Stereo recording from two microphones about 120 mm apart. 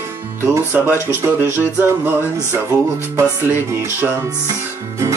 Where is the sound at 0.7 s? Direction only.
10° right (ahead or behind).